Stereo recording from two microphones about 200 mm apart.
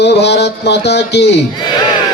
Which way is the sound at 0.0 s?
55° left (ahead or behind).